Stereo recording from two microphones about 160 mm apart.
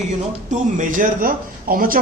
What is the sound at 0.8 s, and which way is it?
Speech, 55° right (ahead or behind).